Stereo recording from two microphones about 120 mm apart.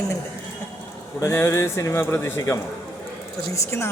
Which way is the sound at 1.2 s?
25° left (ahead or behind).